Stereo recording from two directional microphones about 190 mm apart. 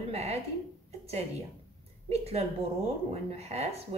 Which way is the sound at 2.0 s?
35° right (ahead or behind).